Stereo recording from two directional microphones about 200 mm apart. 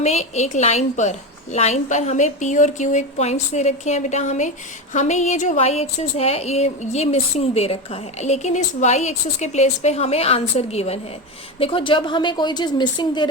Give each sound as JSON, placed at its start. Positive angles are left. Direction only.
{"t": 0.0, "sound": "a woman's voice", "side_deg": 35}